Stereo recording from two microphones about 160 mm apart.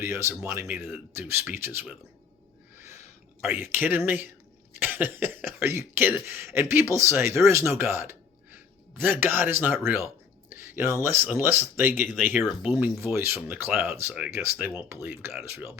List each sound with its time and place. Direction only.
0.1 s speech: 15° right (ahead or behind)
3.4 s speech: 10° right (ahead or behind)
12.3 s speech: 5° right (ahead or behind)